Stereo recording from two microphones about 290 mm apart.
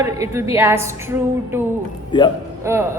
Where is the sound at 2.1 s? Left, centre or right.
Centre.